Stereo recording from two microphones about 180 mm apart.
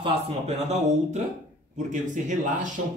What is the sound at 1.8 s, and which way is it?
Speech, 45° right (ahead or behind).